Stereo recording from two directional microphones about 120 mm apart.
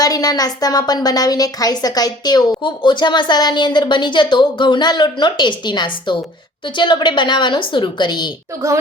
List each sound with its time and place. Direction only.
0.0 s a woman's voice: 30° left (ahead or behind)